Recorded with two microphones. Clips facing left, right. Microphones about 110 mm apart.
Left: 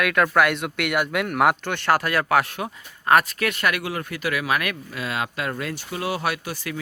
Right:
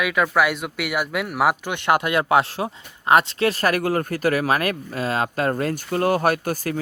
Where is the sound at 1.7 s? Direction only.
20° right (ahead or behind).